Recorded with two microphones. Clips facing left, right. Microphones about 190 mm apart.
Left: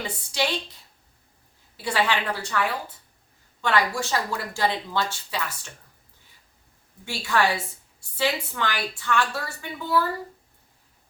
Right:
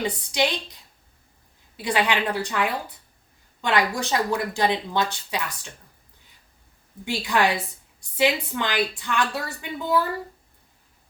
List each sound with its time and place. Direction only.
0.3 s a woman's voice: 15° right (ahead or behind)
7.0 s a woman's voice: 15° right (ahead or behind)